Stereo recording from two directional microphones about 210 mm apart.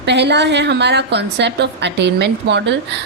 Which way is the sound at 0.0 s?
55° right (ahead or behind).